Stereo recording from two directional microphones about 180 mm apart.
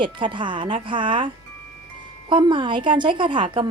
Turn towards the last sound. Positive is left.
turn(degrees=-30)  # may be behind; listen again after turning